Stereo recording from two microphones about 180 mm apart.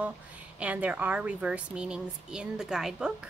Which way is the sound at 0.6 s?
5° right (ahead or behind).